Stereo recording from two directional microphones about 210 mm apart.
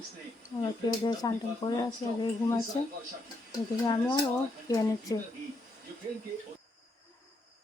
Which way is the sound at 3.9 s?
20° left (ahead or behind).